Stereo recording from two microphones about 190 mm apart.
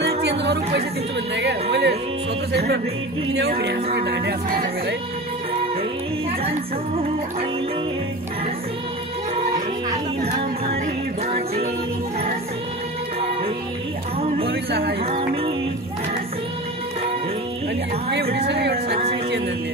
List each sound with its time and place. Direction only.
0.0 s chatter: 60° right (ahead or behind)
1.3 s speech: 65° right (ahead or behind)
14.5 s speech: 60° right (ahead or behind)
15.0 s music: 30° right (ahead or behind)
18.1 s speech: 60° right (ahead or behind)